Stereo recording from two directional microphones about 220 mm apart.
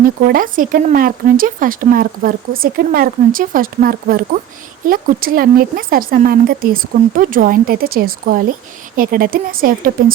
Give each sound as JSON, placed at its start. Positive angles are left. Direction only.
{"t": 0.0, "sound": "speech", "side_deg": -40}